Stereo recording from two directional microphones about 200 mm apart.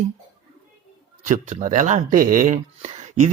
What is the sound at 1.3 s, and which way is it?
Speech, 35° right (ahead or behind).